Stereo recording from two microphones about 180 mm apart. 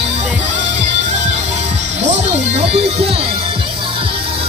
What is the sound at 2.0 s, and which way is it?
Music, 40° right (ahead or behind).